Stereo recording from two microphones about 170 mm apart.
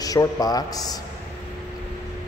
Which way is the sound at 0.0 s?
20° left (ahead or behind).